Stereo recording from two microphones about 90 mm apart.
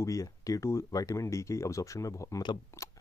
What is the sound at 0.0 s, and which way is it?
Speech, 40° left (ahead or behind).